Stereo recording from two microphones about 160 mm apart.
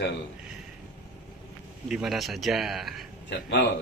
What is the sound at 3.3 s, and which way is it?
Speech, 90° left.